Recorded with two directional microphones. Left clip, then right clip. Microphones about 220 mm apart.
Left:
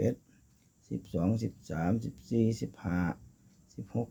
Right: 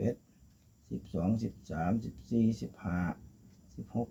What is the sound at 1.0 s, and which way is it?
Speech, 50° left (ahead or behind).